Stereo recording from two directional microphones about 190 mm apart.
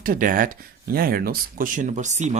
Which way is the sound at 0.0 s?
45° right (ahead or behind).